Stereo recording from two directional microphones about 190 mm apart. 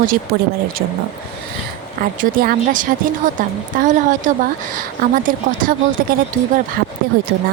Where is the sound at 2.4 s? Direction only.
45° right (ahead or behind).